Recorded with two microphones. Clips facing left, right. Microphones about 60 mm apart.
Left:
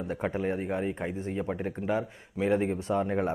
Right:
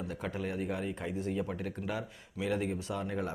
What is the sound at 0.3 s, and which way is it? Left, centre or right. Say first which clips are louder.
Speech: left 4 dB; left.